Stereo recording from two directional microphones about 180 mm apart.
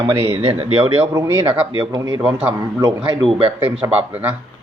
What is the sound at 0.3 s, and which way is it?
A man's voice, 35° right (ahead or behind).